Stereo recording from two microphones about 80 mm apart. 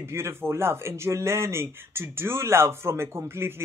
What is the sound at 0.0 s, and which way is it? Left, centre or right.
Speech, right.